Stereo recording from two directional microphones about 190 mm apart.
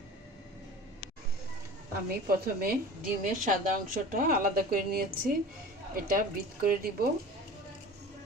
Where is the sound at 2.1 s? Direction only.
50° right (ahead or behind).